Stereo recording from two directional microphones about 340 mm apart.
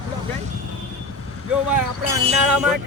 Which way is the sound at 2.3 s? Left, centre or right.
Centre.